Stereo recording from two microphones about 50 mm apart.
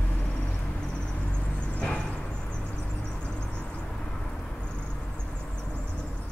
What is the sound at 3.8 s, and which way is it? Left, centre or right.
Vehicle, centre.